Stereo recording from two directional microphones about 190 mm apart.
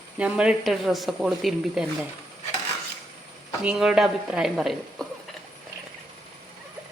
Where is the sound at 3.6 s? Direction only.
5° right (ahead or behind).